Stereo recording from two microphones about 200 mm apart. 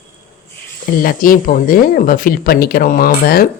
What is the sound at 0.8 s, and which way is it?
Speech, 45° left (ahead or behind).